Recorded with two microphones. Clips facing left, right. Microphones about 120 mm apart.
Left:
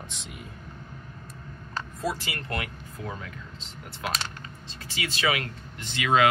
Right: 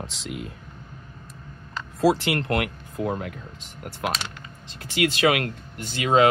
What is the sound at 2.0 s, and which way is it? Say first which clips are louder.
Speech: right 12 dB; 80° right.